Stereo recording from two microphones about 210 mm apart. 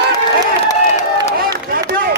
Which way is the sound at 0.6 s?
15° left (ahead or behind).